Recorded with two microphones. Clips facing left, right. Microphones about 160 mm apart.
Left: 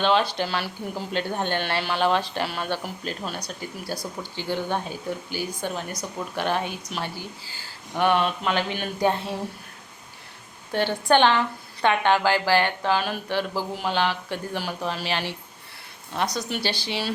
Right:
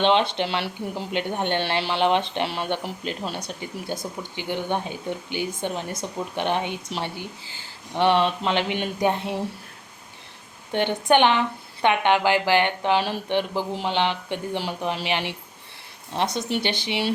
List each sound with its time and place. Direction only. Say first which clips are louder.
0.0 s speech: right 2 dB; 25° right (ahead or behind)
10.7 s speech: right 1 dB; 20° right (ahead or behind)